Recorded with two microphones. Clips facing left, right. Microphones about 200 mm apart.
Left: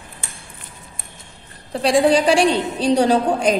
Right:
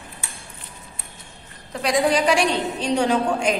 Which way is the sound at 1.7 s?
30° left (ahead or behind).